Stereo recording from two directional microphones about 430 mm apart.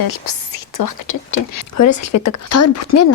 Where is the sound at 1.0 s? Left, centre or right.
Left.